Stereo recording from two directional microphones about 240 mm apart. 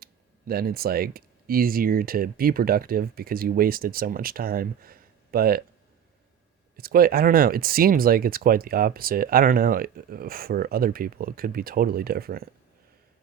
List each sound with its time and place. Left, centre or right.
0.0 s speech: right
6.7 s speech: right